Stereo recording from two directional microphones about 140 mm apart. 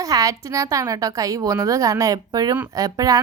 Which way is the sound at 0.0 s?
25° right (ahead or behind).